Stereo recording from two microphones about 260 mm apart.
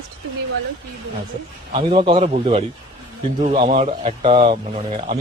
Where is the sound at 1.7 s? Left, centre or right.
Centre.